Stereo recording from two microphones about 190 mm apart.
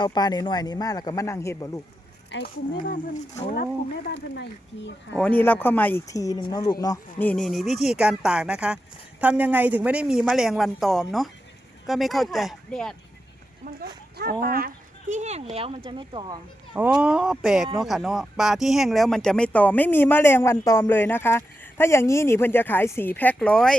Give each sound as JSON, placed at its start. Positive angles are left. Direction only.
{"t": 0.0, "sound": "speech", "side_deg": 20}
{"t": 2.3, "sound": "speech", "side_deg": 50}
{"t": 4.0, "sound": "speech", "side_deg": 65}
{"t": 5.1, "sound": "speech", "side_deg": 10}
{"t": 7.3, "sound": "a woman's voice", "side_deg": 0}
{"t": 13.6, "sound": "speech", "side_deg": -45}
{"t": 15.1, "sound": "speech", "side_deg": -35}
{"t": 16.7, "sound": "a woman's voice", "side_deg": -5}